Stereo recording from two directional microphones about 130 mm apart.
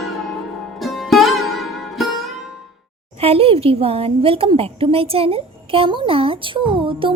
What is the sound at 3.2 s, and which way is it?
A woman's voice, 50° right (ahead or behind).